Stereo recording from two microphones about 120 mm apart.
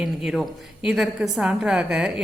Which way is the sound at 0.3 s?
Centre (ahead or behind).